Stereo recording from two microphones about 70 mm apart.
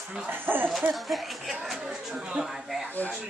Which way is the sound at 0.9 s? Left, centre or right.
Centre.